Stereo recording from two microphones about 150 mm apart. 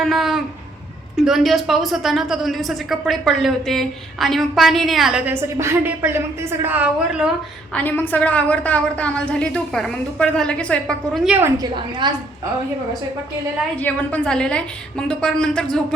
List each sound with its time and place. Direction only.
0.0 s a woman's voice: centre (ahead or behind)
5.3 s a woman's voice: 15° right (ahead or behind)
7.7 s a woman's voice: 10° left (ahead or behind)
11.3 s a woman's voice: 15° right (ahead or behind)
11.6 s a woman's voice: 30° right (ahead or behind)
13.7 s a woman's voice: 10° left (ahead or behind)